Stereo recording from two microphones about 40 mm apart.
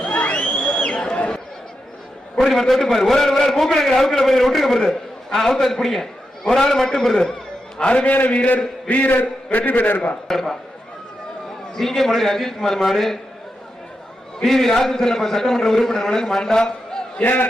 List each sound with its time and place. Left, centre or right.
0.0 s a sound: left
0.5 s a sound: left
1.1 s chatter: left
2.4 s a man's voice: centre
7.8 s a man's voice: left
8.9 s a man's voice: left
10.2 s a man's voice: centre
11.7 s a man's voice: centre
14.4 s a man's voice: centre
17.2 s a man's voice: left